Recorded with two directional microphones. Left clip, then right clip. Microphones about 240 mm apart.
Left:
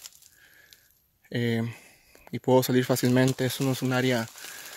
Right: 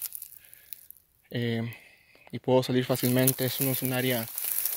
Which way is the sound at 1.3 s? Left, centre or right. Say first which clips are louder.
Left 3 dB; left.